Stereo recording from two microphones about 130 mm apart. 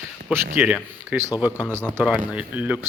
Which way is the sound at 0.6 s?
10° right (ahead or behind).